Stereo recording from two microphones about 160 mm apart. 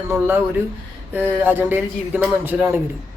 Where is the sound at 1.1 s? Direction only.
15° right (ahead or behind).